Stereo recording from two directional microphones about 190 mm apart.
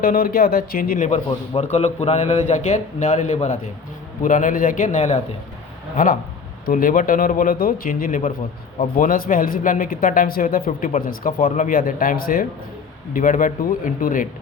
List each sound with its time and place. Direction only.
0.0 s a man's voice: 50° left (ahead or behind)
6.7 s speech: 50° left (ahead or behind)